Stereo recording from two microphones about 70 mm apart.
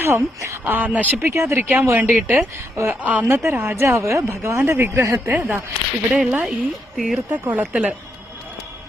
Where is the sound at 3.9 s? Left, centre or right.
Right.